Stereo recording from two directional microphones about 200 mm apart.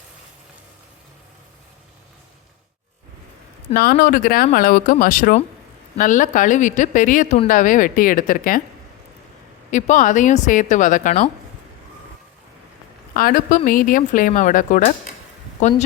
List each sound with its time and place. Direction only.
3.8 s speech: 45° left (ahead or behind)
9.7 s speech: 40° left (ahead or behind)
13.1 s speech: 45° left (ahead or behind)